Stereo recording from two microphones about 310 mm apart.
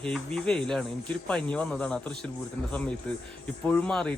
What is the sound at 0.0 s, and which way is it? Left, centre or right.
Speech, centre.